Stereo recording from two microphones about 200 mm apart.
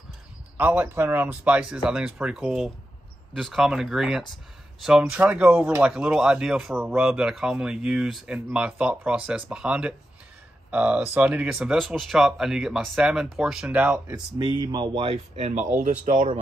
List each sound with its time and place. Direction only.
0.6 s speech: 10° right (ahead or behind)
14.6 s speech: 20° right (ahead or behind); by 16.3 s 40° right (ahead or behind)